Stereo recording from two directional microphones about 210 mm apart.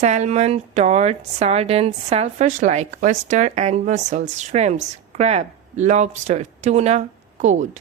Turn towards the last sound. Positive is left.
turn(degrees=-35)  # may be behind; listen again after turning